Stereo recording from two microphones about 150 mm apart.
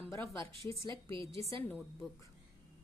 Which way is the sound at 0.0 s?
20° left (ahead or behind).